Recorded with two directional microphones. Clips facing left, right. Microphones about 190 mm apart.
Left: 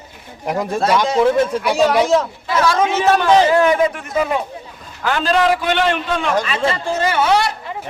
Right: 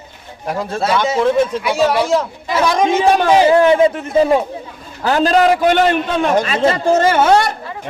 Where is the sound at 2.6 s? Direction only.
15° right (ahead or behind).